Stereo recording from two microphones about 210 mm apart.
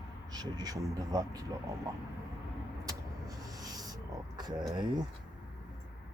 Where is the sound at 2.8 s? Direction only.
15° right (ahead or behind).